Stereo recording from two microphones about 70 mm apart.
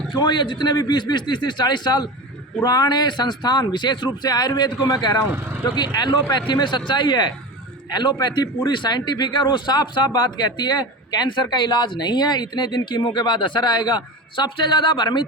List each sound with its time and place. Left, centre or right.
0.2 s a man's voice: left